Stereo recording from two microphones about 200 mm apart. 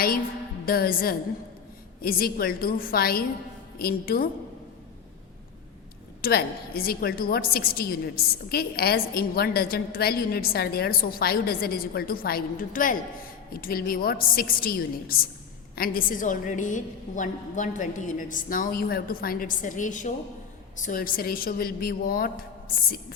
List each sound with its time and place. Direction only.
0.6 s a woman's voice: 50° left (ahead or behind)
6.2 s a woman's voice: 50° left (ahead or behind)